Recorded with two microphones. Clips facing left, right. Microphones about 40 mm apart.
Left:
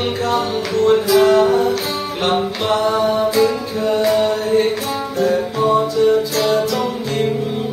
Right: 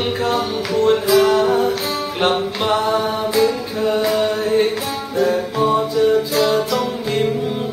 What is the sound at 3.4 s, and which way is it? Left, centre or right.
Music, centre.